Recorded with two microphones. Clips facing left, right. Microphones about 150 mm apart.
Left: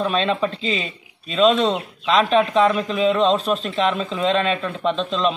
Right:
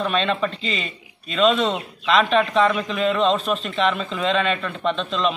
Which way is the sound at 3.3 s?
35° left (ahead or behind).